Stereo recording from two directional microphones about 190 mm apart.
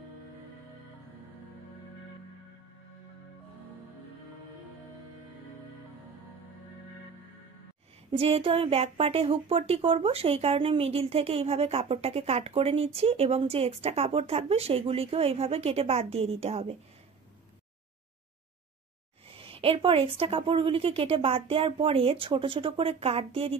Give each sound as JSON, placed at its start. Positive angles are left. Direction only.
{"t": 8.1, "sound": "a woman's voice", "side_deg": -30}
{"t": 19.2, "sound": "a woman's voice", "side_deg": -30}